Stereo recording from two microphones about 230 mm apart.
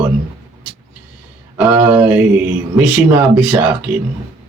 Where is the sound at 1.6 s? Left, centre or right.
Centre.